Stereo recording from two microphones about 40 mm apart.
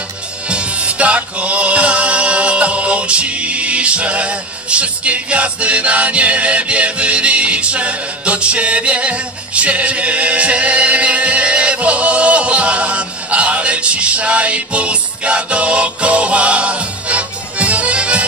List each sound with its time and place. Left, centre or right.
0.5 s music: right